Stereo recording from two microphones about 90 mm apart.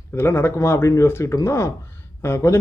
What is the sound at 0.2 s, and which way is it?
A man's voice, 30° left (ahead or behind).